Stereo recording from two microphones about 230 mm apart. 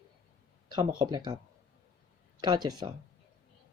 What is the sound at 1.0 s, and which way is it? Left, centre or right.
Speech, centre.